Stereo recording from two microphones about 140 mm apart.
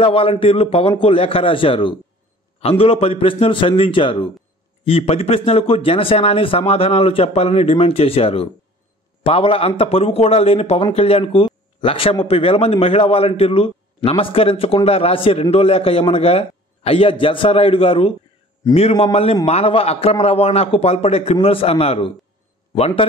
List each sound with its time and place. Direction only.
0.0 s a man's voice: 40° left (ahead or behind)